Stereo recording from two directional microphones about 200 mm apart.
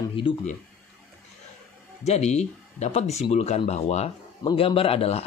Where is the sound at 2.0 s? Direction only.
35° left (ahead or behind).